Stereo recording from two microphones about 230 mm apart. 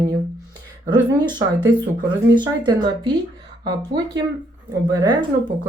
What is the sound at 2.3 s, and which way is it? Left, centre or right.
A woman's voice, centre.